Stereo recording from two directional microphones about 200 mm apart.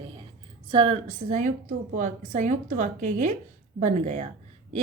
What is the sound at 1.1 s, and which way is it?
A woman's voice, 40° right (ahead or behind).